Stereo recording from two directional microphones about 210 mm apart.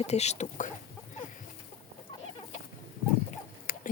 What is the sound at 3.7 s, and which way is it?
Oink, 40° left (ahead or behind).